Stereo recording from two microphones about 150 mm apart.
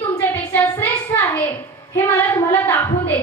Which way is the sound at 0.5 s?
15° left (ahead or behind).